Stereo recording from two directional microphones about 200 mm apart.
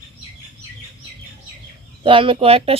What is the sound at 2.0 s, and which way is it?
Speech, 25° right (ahead or behind).